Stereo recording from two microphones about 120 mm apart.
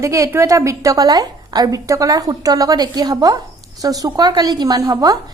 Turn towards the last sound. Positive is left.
turn(degrees=-30)  # may be behind; listen again after turning